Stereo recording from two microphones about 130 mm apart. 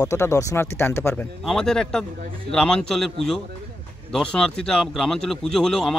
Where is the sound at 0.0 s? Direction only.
25° left (ahead or behind).